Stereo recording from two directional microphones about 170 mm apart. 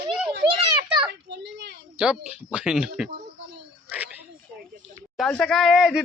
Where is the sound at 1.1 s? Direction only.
85° right.